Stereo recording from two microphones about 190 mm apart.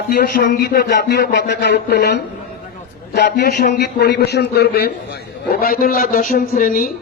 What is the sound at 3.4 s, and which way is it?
A man's voice, 55° left (ahead or behind).